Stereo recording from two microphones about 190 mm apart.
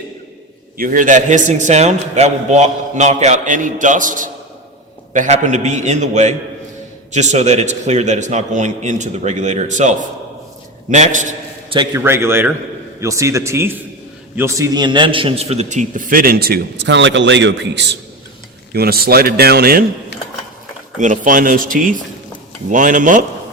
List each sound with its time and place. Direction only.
0.8 s a man's voice: 45° right (ahead or behind)
10.9 s a man's voice: 40° right (ahead or behind)
11.9 s a man's voice: 15° right (ahead or behind); by 17.8 s 70° right (ahead or behind)
18.7 s a man's voice: 55° right (ahead or behind)
21.0 s a man's voice: 45° right (ahead or behind)